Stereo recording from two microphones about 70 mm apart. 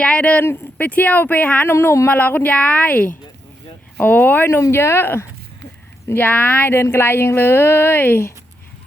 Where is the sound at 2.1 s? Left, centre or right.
Left.